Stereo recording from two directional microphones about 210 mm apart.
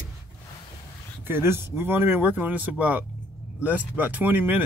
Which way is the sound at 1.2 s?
10° right (ahead or behind).